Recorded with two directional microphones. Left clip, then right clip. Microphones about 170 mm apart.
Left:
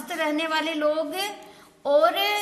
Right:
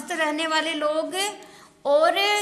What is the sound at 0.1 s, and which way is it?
A woman's voice, 15° right (ahead or behind).